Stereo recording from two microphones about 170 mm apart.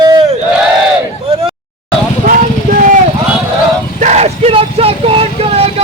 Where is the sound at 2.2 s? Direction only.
50° right (ahead or behind).